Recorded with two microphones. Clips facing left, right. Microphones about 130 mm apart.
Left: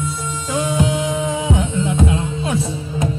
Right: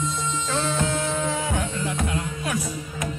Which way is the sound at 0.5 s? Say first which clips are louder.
Left 7 dB; 15° left (ahead or behind).